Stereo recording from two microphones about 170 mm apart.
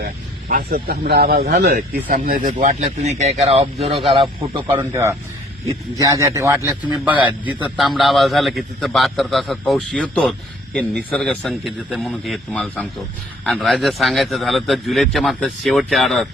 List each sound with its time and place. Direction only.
0.0 s speech: 60° right (ahead or behind); by 4.7 s 30° right (ahead or behind)
4.7 s a man's voice: 15° right (ahead or behind); by 16.3 s centre (ahead or behind)